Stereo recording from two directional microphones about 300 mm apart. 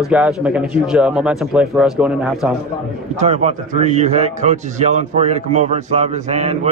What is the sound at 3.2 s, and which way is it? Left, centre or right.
A man's voice, right.